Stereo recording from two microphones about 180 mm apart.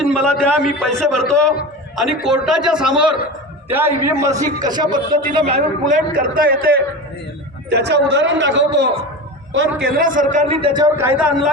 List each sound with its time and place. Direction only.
0.0 s a man's voice: 5° left (ahead or behind); by 4.9 s 20° right (ahead or behind)
4.9 s a man's voice: 50° right (ahead or behind)
5.3 s speech: 30° right (ahead or behind)
5.8 s a man's voice: 50° right (ahead or behind)
7.7 s a man's voice: 70° right (ahead or behind); by 9.9 s 90° right
10.0 s a man's voice: 45° right (ahead or behind)
10.6 s speech: 25° right (ahead or behind)
10.9 s a man's voice: 10° right (ahead or behind)